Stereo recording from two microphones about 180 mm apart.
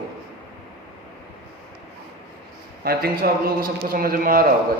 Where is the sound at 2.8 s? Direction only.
55° right (ahead or behind).